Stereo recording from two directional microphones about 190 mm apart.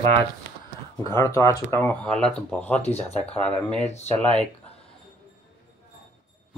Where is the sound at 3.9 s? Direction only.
35° left (ahead or behind).